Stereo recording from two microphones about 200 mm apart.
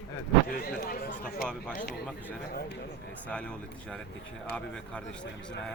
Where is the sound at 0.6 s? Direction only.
50° left (ahead or behind).